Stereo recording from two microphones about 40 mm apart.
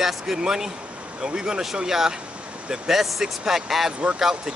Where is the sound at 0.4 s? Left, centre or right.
Centre.